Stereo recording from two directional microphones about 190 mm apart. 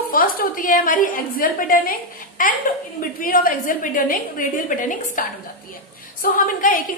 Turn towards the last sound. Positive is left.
turn(degrees=45)  # may be behind; listen again after turning